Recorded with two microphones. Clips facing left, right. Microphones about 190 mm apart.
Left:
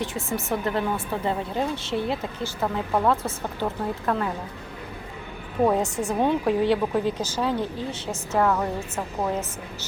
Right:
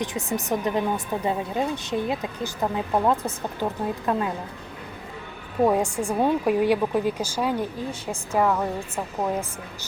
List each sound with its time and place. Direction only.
0.0 s speech: 15° right (ahead or behind)
5.6 s speech: 10° right (ahead or behind)